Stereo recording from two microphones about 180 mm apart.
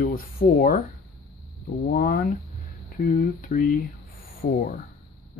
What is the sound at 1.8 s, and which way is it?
Speech, 55° left (ahead or behind).